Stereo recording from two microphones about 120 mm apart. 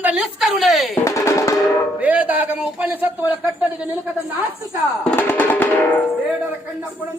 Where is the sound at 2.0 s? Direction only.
10° right (ahead or behind).